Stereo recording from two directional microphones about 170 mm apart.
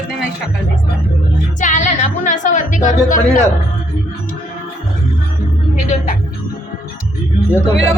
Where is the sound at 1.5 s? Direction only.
45° left (ahead or behind).